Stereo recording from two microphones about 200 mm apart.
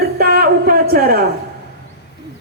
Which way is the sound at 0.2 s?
50° right (ahead or behind).